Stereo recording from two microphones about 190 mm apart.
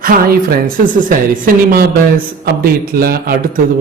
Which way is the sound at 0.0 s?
50° right (ahead or behind).